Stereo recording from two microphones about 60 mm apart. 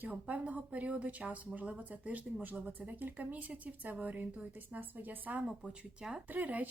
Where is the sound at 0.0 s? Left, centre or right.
Right.